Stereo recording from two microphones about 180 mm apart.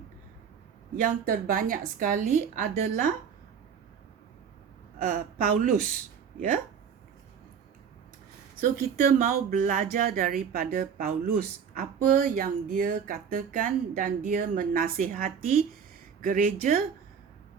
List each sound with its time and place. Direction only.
1.0 s speech: 50° right (ahead or behind)
5.0 s speech: 45° right (ahead or behind)
8.8 s speech: 55° right (ahead or behind)